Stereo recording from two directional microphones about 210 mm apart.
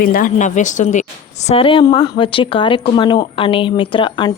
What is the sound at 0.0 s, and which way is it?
A woman's voice, 40° left (ahead or behind).